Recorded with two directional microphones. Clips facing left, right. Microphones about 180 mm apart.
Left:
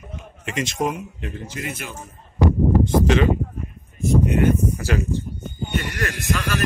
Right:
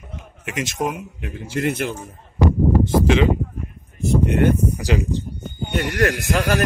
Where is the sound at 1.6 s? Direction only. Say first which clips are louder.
Right 11 dB; 60° right (ahead or behind).